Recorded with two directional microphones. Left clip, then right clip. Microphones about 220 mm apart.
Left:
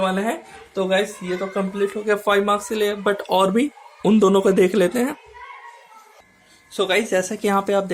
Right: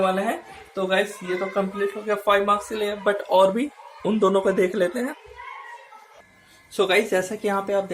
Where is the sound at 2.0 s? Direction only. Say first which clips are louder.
Left 1 dB; 50° left (ahead or behind).